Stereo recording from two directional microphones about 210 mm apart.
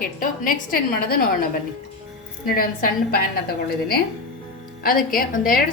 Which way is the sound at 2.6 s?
45° left (ahead or behind).